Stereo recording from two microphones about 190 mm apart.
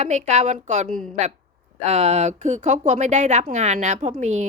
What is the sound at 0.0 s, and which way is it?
Speech, 35° right (ahead or behind).